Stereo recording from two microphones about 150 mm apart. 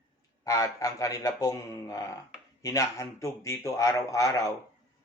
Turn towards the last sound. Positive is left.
turn(degrees=20)  # may be behind; listen again after turning